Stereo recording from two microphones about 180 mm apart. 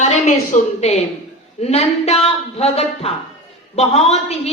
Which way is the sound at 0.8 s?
35° left (ahead or behind).